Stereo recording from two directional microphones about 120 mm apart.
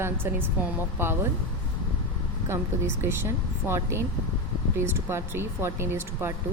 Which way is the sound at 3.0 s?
20° right (ahead or behind).